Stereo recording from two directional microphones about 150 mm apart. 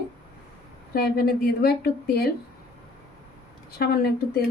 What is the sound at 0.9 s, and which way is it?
A woman's voice, 90° left.